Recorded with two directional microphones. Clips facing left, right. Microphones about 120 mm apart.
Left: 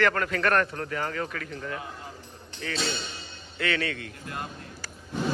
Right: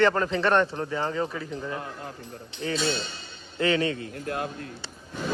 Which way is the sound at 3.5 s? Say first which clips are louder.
Right 5 dB; 35° right (ahead or behind).